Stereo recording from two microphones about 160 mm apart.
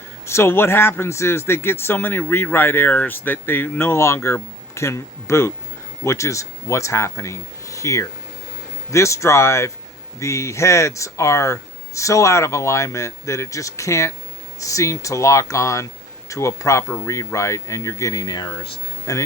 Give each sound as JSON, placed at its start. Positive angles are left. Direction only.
{"t": 0.3, "sound": "speech", "side_deg": 15}